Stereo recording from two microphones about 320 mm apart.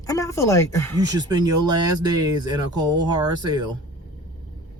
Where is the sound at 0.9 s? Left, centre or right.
Centre.